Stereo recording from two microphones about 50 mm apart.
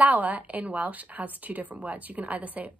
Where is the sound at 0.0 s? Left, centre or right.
Right.